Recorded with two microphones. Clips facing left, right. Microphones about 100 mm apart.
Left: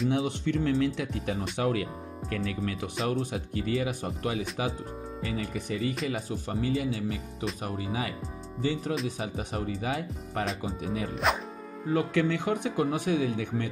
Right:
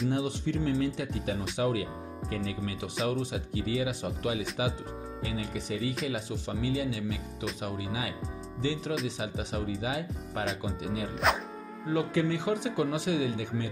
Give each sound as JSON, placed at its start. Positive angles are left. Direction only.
{"t": 0.1, "sound": "speech", "side_deg": 70}
{"t": 3.1, "sound": "speech", "side_deg": 50}
{"t": 11.2, "sound": "speech", "side_deg": 0}
{"t": 11.9, "sound": "speech", "side_deg": 55}